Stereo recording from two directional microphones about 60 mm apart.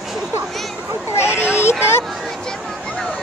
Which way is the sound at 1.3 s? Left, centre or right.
Right.